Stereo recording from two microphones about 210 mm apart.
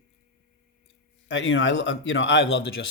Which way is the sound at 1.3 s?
65° left (ahead or behind).